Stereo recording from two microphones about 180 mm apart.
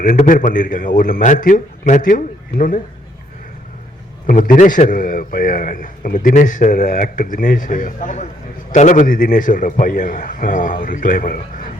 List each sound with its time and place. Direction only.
0.0 s speech: 45° left (ahead or behind)
4.3 s speech: 45° left (ahead or behind)